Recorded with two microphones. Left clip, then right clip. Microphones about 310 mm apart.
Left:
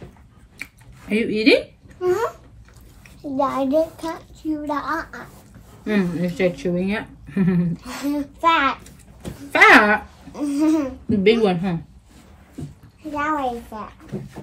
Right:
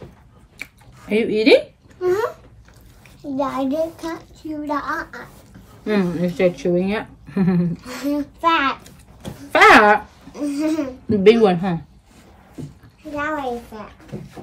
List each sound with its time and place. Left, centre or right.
0.6 s a sound: centre
2.0 s a child's voice: centre
5.9 s a woman's voice: centre
7.7 s a child's voice: centre
9.5 s a woman's voice: centre
10.3 s a child's voice: centre
11.1 s a woman's voice: centre
13.7 s a child's voice: centre